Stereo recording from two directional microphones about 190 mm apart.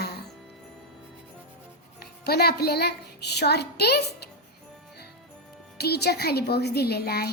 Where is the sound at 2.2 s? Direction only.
55° left (ahead or behind).